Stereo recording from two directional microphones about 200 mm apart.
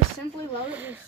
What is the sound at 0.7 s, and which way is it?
Speech, 10° right (ahead or behind).